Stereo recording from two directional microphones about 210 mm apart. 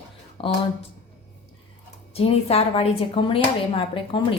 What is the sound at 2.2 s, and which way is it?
Speech, 30° left (ahead or behind).